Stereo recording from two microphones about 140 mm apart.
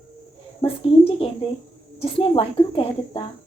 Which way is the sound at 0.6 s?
40° left (ahead or behind).